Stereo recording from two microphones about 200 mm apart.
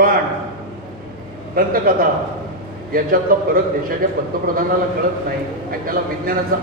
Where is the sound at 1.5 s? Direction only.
45° right (ahead or behind).